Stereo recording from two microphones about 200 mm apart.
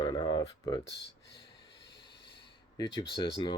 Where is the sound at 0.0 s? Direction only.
20° left (ahead or behind).